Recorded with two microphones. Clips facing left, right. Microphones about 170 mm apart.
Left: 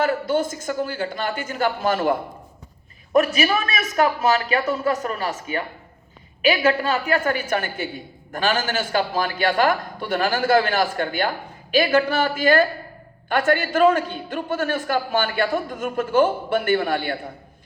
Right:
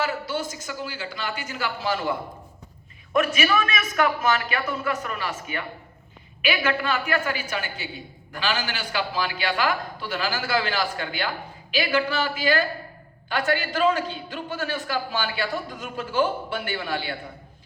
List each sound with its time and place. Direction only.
0.0 s a man's voice: 50° left (ahead or behind)
3.3 s a man's voice: 35° left (ahead or behind)
7.3 s a man's voice: 50° left (ahead or behind)